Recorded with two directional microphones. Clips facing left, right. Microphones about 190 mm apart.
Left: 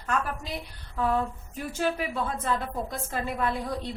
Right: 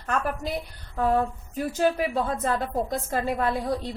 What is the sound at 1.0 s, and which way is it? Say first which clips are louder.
A woman's voice: right 3 dB; 45° right (ahead or behind).